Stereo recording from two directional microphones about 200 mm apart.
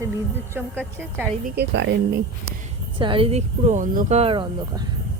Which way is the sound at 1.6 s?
60° right (ahead or behind).